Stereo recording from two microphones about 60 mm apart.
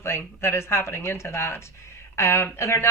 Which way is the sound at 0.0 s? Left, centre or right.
Left.